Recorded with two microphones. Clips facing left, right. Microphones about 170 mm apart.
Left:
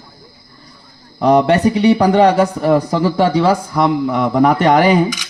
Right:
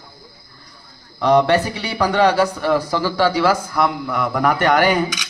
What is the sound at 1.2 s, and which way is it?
Speech, 40° left (ahead or behind).